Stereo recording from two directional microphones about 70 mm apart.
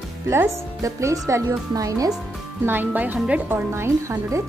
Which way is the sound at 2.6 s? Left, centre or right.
Right.